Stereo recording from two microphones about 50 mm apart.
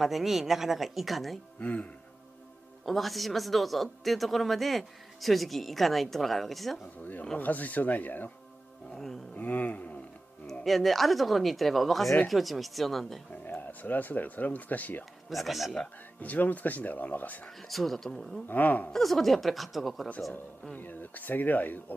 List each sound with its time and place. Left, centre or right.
0.0 s speech: centre
1.6 s speech: left
2.8 s speech: centre
7.3 s speech: left
8.9 s speech: centre
9.4 s speech: left
10.6 s speech: centre
13.3 s speech: left
15.2 s speech: centre
16.2 s speech: left
17.6 s speech: centre
18.5 s speech: left
18.9 s speech: centre
20.7 s speech: left